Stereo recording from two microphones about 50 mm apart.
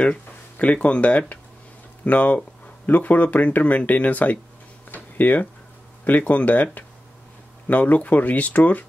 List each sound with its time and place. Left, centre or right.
0.0 s speech: left
4.9 s a sound: left
6.0 s speech: left